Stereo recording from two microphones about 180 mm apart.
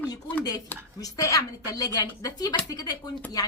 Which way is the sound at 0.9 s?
20° left (ahead or behind).